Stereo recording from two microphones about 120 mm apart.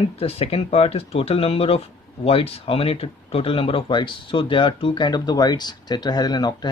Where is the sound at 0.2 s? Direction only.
55° left (ahead or behind).